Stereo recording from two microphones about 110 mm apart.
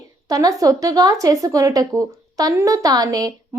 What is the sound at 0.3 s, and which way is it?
A woman's voice, 35° right (ahead or behind).